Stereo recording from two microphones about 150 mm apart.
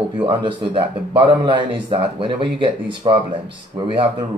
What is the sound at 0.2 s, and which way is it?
A man's voice, 35° right (ahead or behind).